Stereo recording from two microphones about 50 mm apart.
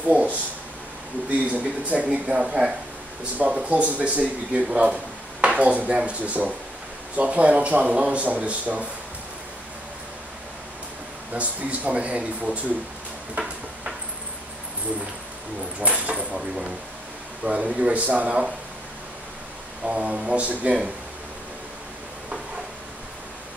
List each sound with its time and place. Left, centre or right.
0.0 s speech: right
1.5 s speech: right
11.3 s speech: right
15.8 s speech: right
16.3 s speech: centre; by 18.4 s right
19.8 s speech: right